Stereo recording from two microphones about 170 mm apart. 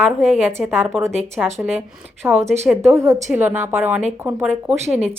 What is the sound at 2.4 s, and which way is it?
Speech, 40° right (ahead or behind).